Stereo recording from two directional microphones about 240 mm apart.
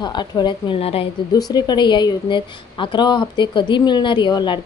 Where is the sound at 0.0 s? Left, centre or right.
Centre.